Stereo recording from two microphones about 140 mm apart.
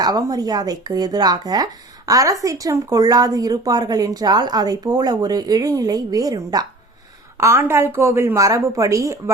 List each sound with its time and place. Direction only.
0.0 s speech: 25° right (ahead or behind)